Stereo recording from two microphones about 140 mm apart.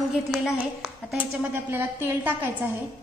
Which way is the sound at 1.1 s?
10° right (ahead or behind).